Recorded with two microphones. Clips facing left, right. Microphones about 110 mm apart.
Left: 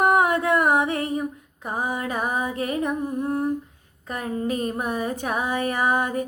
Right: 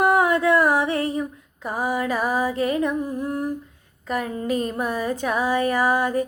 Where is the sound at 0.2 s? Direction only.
25° left (ahead or behind).